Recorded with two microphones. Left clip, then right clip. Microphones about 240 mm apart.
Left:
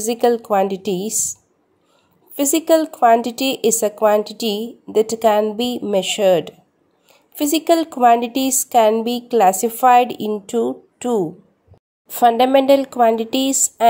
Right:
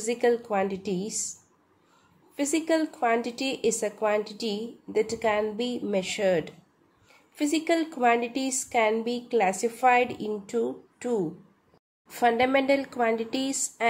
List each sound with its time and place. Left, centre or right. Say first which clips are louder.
0.0 s a woman's voice: left 8 dB; left